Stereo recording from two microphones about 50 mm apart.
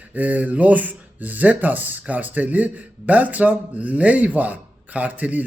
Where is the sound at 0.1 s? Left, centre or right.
Right.